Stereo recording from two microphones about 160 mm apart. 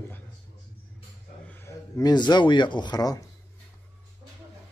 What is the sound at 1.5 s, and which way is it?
Speech, 20° left (ahead or behind).